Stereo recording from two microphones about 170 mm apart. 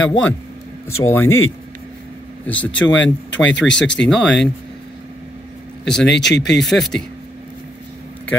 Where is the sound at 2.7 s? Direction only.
90° left.